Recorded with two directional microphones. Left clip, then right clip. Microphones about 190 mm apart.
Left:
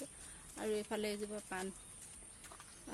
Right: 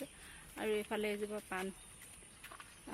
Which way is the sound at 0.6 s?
25° right (ahead or behind).